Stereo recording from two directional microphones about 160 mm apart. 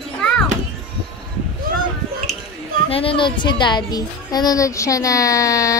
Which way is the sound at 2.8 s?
35° left (ahead or behind).